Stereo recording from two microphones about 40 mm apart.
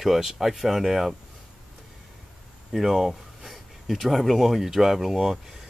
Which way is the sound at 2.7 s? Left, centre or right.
Centre.